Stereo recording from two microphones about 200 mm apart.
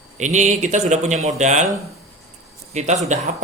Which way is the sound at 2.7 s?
35° right (ahead or behind).